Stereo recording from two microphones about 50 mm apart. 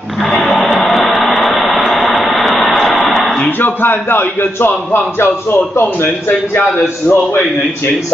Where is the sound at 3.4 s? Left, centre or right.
Left.